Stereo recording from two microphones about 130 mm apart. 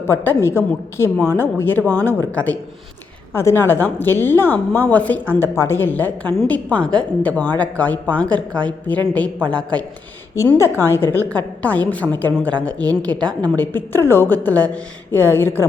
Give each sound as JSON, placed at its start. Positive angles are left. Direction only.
{"t": 0.1, "sound": "a woman's voice", "side_deg": 20}
{"t": 10.5, "sound": "a woman's voice", "side_deg": 20}